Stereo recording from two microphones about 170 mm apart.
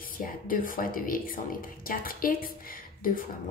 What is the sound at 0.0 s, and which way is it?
Speech, 55° left (ahead or behind).